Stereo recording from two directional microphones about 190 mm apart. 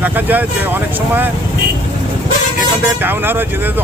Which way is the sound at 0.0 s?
10° right (ahead or behind).